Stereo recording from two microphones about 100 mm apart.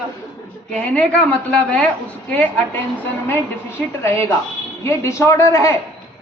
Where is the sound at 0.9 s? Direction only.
10° left (ahead or behind).